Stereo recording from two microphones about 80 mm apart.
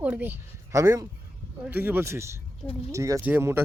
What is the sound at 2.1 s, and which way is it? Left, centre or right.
Speech, right.